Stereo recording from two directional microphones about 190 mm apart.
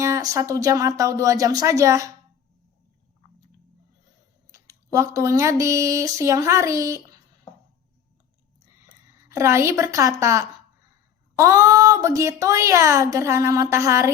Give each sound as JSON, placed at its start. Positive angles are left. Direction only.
{"t": 0.0, "sound": "a woman's voice", "side_deg": -15}
{"t": 4.5, "sound": "speech", "side_deg": -15}
{"t": 9.3, "sound": "a woman's voice", "side_deg": -15}